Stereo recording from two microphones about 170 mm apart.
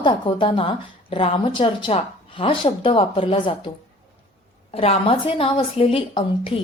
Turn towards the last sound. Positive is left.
turn(degrees=30)  # may be behind; listen again after turning